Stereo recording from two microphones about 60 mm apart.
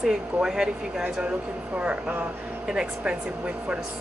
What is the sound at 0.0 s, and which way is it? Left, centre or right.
Speech, centre.